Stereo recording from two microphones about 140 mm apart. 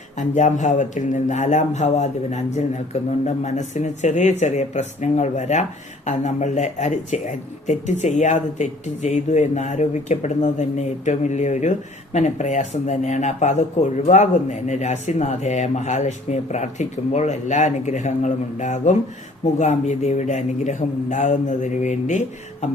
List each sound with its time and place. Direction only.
0.2 s speech: 60° left (ahead or behind)